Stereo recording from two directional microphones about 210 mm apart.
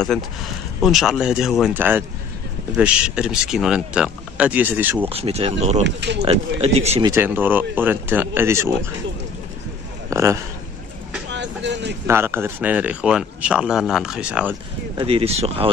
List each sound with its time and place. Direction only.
0.7 s speech: centre (ahead or behind)
5.1 s speech: 30° right (ahead or behind)
5.9 s speech: 55° right (ahead or behind)
6.2 s speech: 30° right (ahead or behind)
7.1 s speech: 10° right (ahead or behind)
10.0 s speech: 15° right (ahead or behind)
11.2 s vehicle: 55° right (ahead or behind)
12.1 s speech: 10° right (ahead or behind)
15.0 s speech: 25° right (ahead or behind)